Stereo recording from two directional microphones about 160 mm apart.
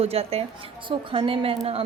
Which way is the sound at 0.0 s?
40° right (ahead or behind).